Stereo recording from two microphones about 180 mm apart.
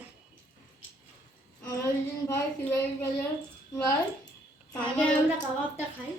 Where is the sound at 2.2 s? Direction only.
15° left (ahead or behind).